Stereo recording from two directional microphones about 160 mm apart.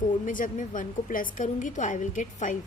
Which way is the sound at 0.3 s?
55° left (ahead or behind).